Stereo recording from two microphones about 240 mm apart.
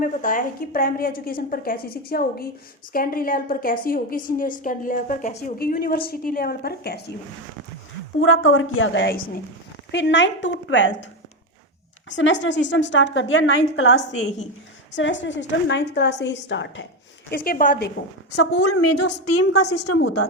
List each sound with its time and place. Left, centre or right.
0.0 s a woman's voice: left
8.2 s a woman's voice: left
12.0 s a woman's voice: left
17.3 s a woman's voice: left
18.6 s a woman's voice: left